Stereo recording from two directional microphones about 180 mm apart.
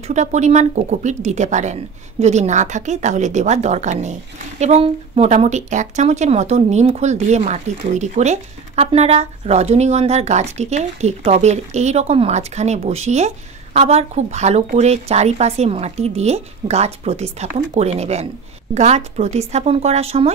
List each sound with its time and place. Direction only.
0.0 s speech: 40° right (ahead or behind)